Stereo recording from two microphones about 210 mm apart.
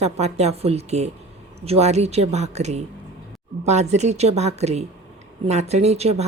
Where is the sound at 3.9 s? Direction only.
30° right (ahead or behind).